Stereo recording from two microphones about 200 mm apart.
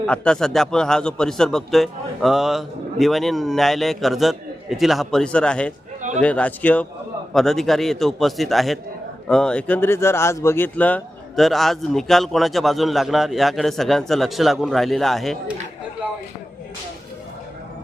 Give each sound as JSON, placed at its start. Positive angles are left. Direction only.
{"t": 0.0, "sound": "speech", "side_deg": 5}
{"t": 6.0, "sound": "a sound", "side_deg": -40}
{"t": 6.2, "sound": "a man's voice", "side_deg": 5}